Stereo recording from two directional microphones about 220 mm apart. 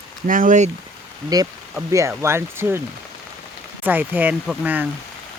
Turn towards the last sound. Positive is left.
turn(degrees=-5)  # may be behind; listen again after turning